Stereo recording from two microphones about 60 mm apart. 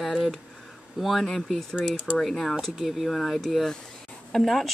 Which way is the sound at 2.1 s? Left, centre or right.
Centre.